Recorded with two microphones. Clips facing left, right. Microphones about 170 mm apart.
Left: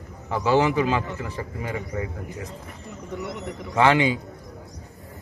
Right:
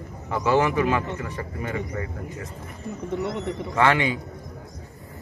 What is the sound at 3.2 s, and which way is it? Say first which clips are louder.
Speech: right 4 dB; 20° right (ahead or behind).